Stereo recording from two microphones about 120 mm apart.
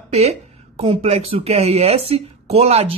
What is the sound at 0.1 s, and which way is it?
Speech, 60° right (ahead or behind).